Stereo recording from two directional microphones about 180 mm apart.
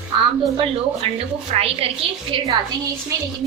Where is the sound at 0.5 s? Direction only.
35° right (ahead or behind).